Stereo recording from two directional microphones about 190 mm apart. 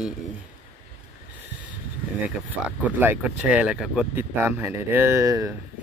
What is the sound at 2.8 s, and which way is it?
Speech, 10° right (ahead or behind).